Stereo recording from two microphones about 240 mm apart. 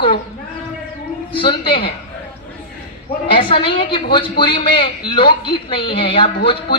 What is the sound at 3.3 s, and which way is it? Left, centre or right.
A man's voice, left.